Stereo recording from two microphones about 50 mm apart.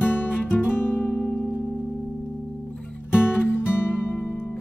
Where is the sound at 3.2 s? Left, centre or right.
Left.